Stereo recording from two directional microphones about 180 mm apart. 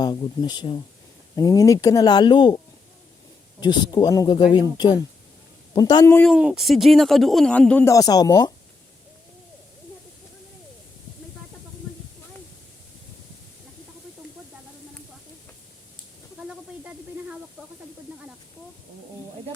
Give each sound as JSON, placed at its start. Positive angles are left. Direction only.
{"t": 0.0, "sound": "speech", "side_deg": 25}
{"t": 3.6, "sound": "speech", "side_deg": 20}
{"t": 6.1, "sound": "speech", "side_deg": 0}
{"t": 7.9, "sound": "speech", "side_deg": 20}
{"t": 16.5, "sound": "snake", "side_deg": -5}